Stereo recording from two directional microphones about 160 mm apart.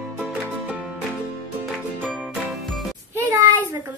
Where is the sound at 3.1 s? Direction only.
20° right (ahead or behind).